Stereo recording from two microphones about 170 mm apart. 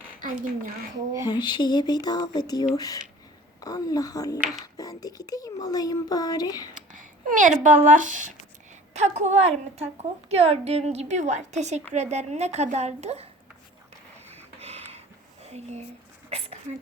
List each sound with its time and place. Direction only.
0.2 s speech: 55° right (ahead or behind)
1.2 s speech: 25° left (ahead or behind)
6.7 s a sound: 50° right (ahead or behind)
7.9 s a woman's voice: 50° right (ahead or behind)
14.3 s a sound: 40° right (ahead or behind)
15.4 s speech: 40° right (ahead or behind)